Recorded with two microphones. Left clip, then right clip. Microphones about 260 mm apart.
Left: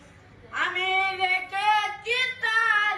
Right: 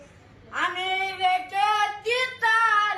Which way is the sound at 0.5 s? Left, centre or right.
Centre.